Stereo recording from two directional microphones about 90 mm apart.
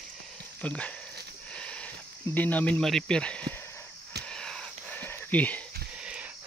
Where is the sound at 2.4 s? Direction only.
15° left (ahead or behind).